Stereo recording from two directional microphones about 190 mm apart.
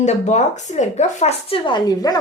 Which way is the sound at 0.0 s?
35° left (ahead or behind).